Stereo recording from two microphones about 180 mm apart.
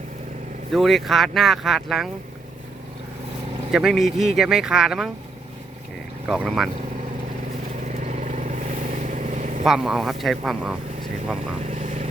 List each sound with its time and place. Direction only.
0.7 s speech: centre (ahead or behind)
3.7 s speech: centre (ahead or behind)
6.2 s speech: 5° right (ahead or behind)
7.9 s vehicle: 40° right (ahead or behind)
9.6 s speech: centre (ahead or behind)
11.6 s vehicle: 40° right (ahead or behind)